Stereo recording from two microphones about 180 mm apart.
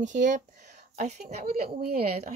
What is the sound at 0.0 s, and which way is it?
Speech, 45° right (ahead or behind).